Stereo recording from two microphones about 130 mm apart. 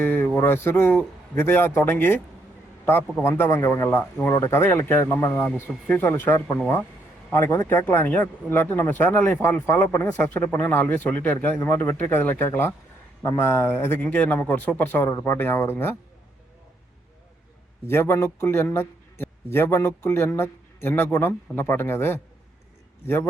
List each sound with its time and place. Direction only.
0.0 s a man's voice: 15° left (ahead or behind)
17.8 s a man's voice: 20° left (ahead or behind)